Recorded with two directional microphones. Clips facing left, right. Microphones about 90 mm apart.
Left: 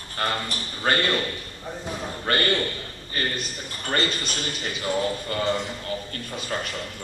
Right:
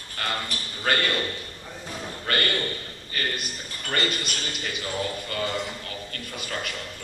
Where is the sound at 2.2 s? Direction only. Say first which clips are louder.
Left 3 dB; 30° left (ahead or behind).